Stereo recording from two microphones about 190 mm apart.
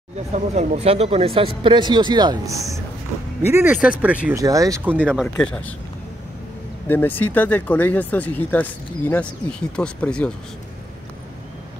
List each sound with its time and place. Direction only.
0.3 s speech: 35° right (ahead or behind); by 5.8 s 5° left (ahead or behind)
6.9 s speech: 10° left (ahead or behind)